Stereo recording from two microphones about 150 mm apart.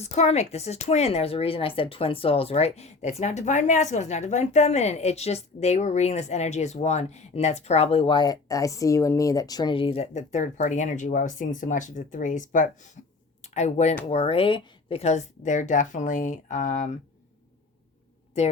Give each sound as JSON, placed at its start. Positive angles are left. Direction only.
{"t": 0.0, "sound": "speech", "side_deg": 45}
{"t": 13.4, "sound": "a woman's voice", "side_deg": 50}
{"t": 18.3, "sound": "speech", "side_deg": 50}